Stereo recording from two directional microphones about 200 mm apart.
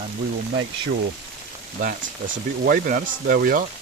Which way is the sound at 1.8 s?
45° right (ahead or behind).